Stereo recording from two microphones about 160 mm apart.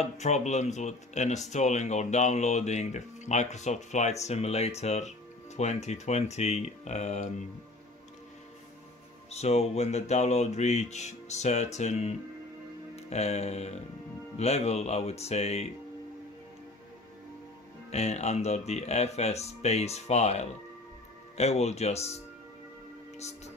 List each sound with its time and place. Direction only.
0.0 s speech: 45° left (ahead or behind)
9.3 s speech: 40° left (ahead or behind)
12.9 s music: 40° left (ahead or behind)
14.4 s speech: 40° left (ahead or behind)
17.9 s speech: 40° left (ahead or behind)